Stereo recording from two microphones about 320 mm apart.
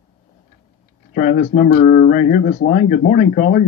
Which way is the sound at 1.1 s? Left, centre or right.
Left.